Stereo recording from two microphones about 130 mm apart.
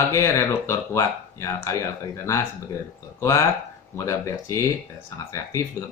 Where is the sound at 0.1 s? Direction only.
25° left (ahead or behind).